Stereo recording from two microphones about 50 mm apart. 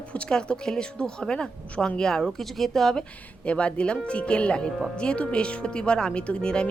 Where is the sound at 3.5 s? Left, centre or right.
Left.